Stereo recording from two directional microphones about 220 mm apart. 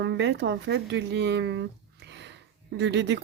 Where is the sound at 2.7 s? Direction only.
50° right (ahead or behind).